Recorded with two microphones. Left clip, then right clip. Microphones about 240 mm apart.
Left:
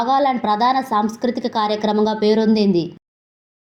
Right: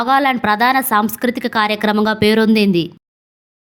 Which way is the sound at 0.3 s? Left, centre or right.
Right.